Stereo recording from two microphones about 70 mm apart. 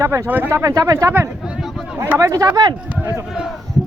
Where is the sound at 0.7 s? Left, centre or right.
Right.